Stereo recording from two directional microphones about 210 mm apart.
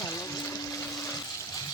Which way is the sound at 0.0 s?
15° left (ahead or behind).